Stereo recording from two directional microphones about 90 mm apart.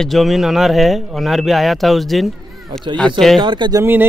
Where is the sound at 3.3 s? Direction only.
55° right (ahead or behind).